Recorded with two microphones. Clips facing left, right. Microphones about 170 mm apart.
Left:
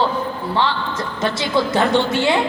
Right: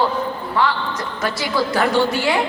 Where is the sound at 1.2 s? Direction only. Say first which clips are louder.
Left 2 dB; 25° left (ahead or behind).